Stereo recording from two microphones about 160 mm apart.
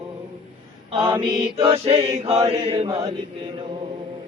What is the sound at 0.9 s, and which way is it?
Mantra, 30° right (ahead or behind).